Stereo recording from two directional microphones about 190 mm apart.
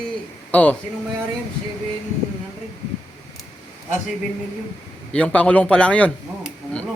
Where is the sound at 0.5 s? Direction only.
10° left (ahead or behind).